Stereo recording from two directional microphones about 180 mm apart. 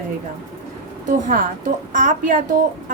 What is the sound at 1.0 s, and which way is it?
A woman's voice, 45° right (ahead or behind).